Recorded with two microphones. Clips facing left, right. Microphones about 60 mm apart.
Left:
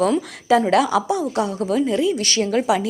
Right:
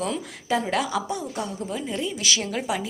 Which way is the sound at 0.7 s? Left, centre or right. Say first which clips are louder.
Left 8 dB; left.